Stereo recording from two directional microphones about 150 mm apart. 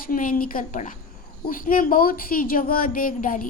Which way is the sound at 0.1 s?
65° left (ahead or behind).